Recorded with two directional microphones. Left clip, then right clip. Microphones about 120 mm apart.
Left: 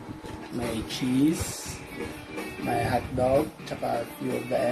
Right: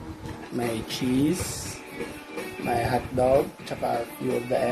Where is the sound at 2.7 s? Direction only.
90° right.